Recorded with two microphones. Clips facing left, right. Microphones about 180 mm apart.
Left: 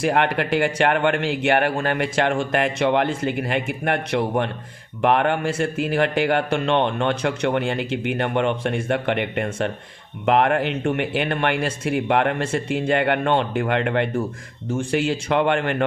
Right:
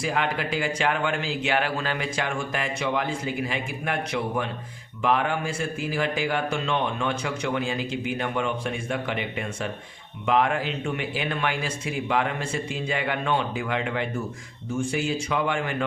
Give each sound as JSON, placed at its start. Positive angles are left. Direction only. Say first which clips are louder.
{"t": 0.0, "sound": "speech", "louder": "left 6 dB", "side_deg": 65}